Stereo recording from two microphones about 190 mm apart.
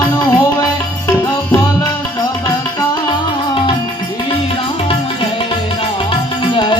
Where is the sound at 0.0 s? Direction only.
20° left (ahead or behind).